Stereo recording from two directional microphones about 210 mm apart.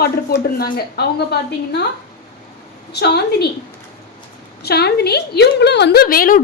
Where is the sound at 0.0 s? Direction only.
45° left (ahead or behind).